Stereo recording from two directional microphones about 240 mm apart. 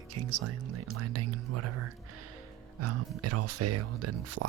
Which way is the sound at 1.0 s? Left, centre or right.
Right.